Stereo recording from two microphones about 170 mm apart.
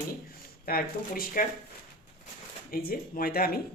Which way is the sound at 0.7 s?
55° left (ahead or behind).